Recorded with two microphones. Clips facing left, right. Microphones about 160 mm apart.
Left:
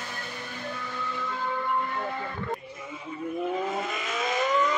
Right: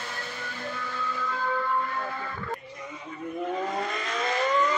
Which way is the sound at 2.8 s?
5° left (ahead or behind).